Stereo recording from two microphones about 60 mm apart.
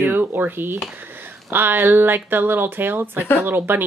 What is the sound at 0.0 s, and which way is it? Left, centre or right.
Dishes, right.